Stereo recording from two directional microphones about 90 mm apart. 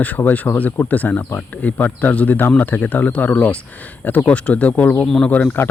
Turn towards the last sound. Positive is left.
turn(degrees=20)  # may be behind; listen again after turning